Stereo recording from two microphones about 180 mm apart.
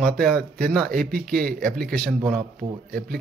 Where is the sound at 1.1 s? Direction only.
55° right (ahead or behind).